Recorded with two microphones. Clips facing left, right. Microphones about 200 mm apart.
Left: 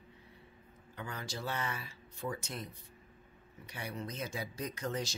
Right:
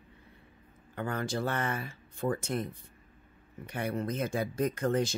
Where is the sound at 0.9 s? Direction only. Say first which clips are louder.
Right 10 dB; 55° right (ahead or behind).